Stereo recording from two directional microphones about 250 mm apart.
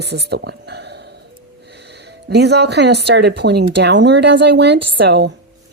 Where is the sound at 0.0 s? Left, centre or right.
Right.